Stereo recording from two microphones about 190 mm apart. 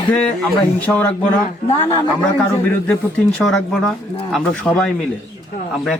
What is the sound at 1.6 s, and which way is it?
Speech, 30° left (ahead or behind).